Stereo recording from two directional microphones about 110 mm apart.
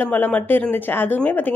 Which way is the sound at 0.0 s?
15° left (ahead or behind).